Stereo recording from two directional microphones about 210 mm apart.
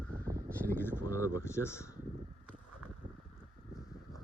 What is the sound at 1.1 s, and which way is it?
Speech, 15° left (ahead or behind).